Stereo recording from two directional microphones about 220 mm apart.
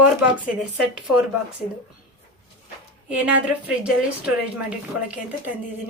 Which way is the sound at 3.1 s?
5° right (ahead or behind).